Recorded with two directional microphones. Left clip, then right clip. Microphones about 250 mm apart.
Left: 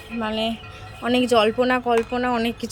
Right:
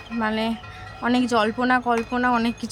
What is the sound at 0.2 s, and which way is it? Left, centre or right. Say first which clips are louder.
Speech: even; centre.